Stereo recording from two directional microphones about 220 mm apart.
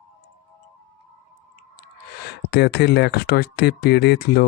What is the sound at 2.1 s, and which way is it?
Speech, 50° left (ahead or behind).